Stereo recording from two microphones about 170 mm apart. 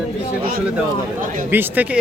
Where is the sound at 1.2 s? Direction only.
55° right (ahead or behind).